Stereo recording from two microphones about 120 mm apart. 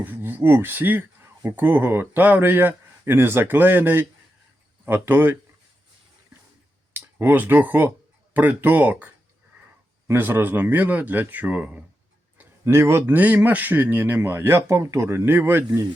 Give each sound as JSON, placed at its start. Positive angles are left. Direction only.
{"t": 0.0, "sound": "speech", "side_deg": -15}
{"t": 6.9, "sound": "a man's voice", "side_deg": -15}